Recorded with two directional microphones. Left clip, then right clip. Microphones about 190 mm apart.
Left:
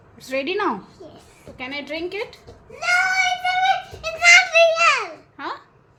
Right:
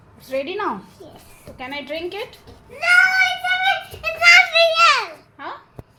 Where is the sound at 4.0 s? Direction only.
20° right (ahead or behind).